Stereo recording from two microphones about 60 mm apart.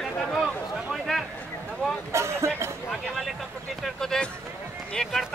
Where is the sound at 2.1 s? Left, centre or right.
Right.